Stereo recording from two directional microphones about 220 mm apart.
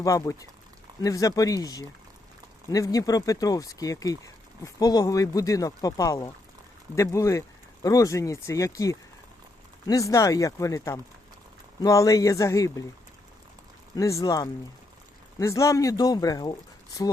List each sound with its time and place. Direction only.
0.0 s speech: 15° left (ahead or behind)
13.9 s speech: 15° left (ahead or behind)